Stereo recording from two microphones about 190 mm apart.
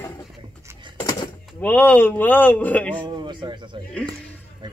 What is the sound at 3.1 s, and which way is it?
Speech, 25° right (ahead or behind).